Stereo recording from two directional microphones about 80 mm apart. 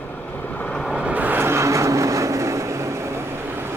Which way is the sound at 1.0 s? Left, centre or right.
Centre.